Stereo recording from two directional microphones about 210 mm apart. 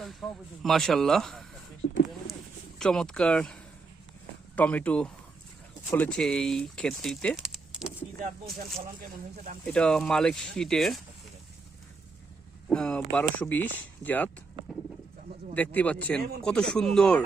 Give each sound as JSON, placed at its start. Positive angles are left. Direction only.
{"t": 0.0, "sound": "speech", "side_deg": 0}
{"t": 1.8, "sound": "speech", "side_deg": 50}
{"t": 2.7, "sound": "speech", "side_deg": 0}
{"t": 9.6, "sound": "speech", "side_deg": 5}
{"t": 12.6, "sound": "speech", "side_deg": 5}
{"t": 15.5, "sound": "speech", "side_deg": 10}